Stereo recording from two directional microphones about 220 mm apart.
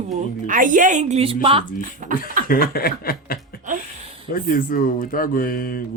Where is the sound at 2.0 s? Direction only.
35° right (ahead or behind).